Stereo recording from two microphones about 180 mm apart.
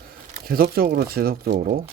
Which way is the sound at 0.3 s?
55° right (ahead or behind).